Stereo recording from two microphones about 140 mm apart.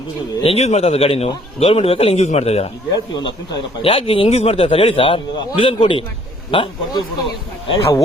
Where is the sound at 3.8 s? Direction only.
40° left (ahead or behind).